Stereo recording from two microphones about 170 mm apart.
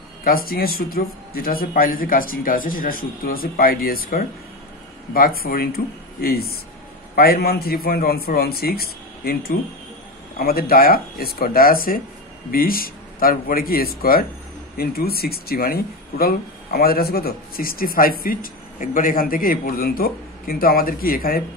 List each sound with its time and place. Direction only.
0.2 s speech: 60° left (ahead or behind)